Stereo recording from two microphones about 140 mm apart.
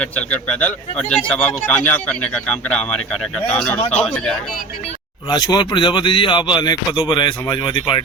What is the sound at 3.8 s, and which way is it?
Speech, 50° left (ahead or behind).